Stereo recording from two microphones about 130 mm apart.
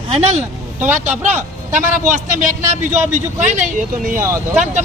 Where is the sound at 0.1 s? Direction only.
55° right (ahead or behind).